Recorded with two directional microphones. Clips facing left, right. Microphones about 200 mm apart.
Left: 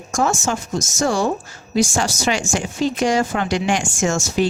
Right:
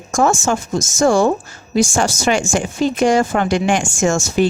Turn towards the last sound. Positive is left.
turn(degrees=-50)  # may be behind; listen again after turning